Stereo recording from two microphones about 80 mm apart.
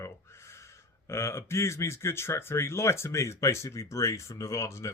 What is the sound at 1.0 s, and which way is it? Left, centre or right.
Speech, left.